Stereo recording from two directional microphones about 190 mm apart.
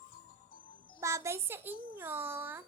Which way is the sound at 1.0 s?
15° right (ahead or behind).